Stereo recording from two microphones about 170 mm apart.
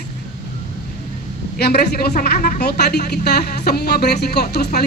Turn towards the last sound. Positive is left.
turn(degrees=75)  # may be behind; listen again after turning